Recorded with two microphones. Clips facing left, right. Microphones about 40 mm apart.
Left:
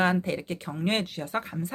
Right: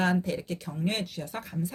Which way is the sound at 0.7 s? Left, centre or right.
Left.